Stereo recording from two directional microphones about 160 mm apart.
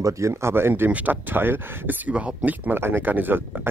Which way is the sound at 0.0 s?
20° right (ahead or behind).